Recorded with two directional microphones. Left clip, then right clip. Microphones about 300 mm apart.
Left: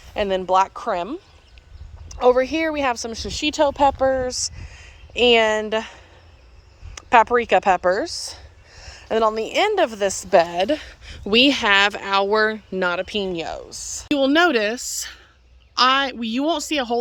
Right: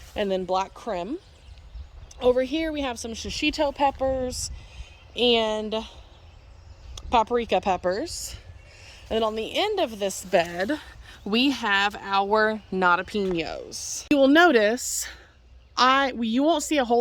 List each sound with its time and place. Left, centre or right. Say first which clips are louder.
0.1 s a woman's voice: left 6 dB; centre
3.1 s speech: left 2 dB; left
4.3 s a woman's voice: left 7 dB; centre